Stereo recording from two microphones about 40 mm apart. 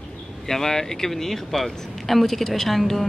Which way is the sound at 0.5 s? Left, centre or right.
Centre.